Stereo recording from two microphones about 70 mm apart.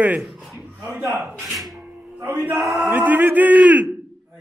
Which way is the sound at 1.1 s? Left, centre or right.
Right.